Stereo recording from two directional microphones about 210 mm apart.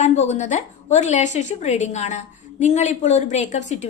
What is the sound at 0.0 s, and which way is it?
A woman's voice, 35° left (ahead or behind).